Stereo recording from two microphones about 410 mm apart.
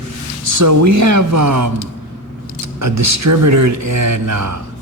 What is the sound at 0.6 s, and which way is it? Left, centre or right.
Speech, right.